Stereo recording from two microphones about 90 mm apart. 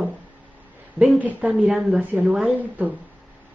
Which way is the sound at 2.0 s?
15° right (ahead or behind).